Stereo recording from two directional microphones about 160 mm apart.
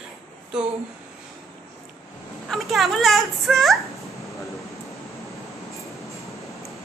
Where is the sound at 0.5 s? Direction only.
5° right (ahead or behind).